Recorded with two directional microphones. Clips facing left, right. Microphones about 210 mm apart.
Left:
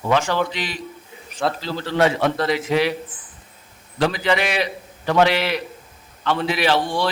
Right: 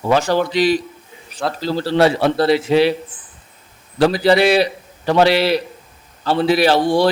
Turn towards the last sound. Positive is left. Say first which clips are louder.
# right 6 dB
turn(degrees=-40)  # may be behind; listen again after turning